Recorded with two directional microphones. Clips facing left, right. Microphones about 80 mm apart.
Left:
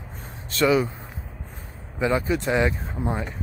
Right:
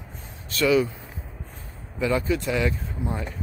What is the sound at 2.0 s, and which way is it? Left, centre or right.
Speech, left.